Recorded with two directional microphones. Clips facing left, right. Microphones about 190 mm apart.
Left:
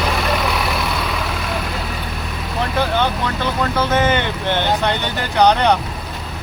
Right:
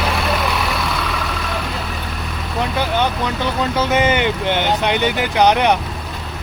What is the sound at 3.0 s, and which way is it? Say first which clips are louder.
Speech: even; 15° right (ahead or behind).